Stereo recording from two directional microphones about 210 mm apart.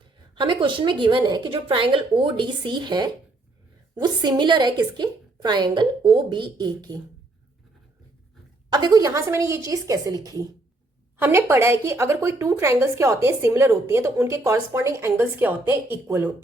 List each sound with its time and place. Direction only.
0.0 s a woman's voice: 25° right (ahead or behind)
8.7 s speech: 20° right (ahead or behind)